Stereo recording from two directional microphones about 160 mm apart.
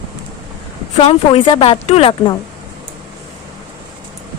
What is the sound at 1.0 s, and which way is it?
A woman's voice, 40° left (ahead or behind).